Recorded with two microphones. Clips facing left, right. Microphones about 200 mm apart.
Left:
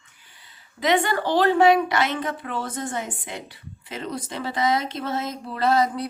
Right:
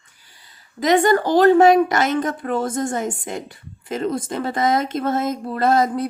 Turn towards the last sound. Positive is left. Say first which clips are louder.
# right 3 dB
turn(degrees=-50)  # may be behind; listen again after turning